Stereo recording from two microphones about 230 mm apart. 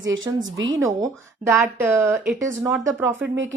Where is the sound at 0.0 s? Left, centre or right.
Right.